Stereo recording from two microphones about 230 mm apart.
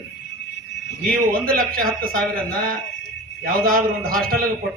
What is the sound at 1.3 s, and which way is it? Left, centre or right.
Speech, right.